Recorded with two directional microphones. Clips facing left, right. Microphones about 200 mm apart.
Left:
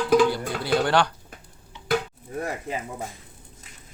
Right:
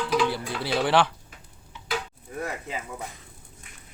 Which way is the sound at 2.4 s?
35° left (ahead or behind).